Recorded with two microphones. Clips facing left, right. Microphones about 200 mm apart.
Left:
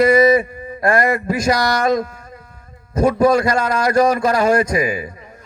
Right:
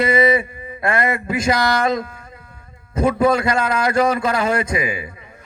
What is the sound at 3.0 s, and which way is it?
A man's voice, 40° left (ahead or behind).